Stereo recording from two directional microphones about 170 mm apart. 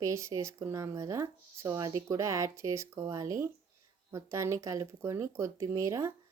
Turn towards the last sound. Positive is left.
turn(degrees=-20)  # may be behind; listen again after turning